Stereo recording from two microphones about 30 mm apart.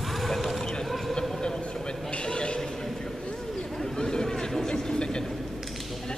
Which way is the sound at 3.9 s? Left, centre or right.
Left.